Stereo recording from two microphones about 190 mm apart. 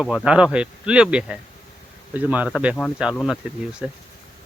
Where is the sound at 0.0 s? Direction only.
5° right (ahead or behind).